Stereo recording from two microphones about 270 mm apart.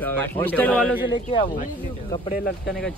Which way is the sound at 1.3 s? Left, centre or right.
Left.